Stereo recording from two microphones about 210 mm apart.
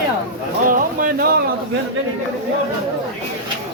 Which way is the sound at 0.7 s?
40° right (ahead or behind).